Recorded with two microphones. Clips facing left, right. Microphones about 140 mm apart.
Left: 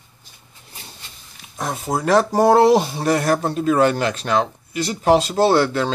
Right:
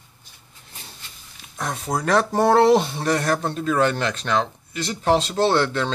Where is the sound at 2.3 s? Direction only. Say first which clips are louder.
Left 2 dB; 10° left (ahead or behind).